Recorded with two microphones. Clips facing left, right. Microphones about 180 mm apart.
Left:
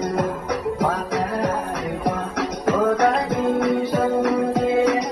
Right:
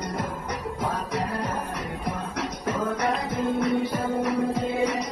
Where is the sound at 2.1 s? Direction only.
90° left.